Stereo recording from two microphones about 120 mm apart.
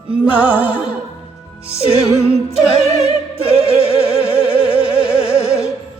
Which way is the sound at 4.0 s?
10° right (ahead or behind).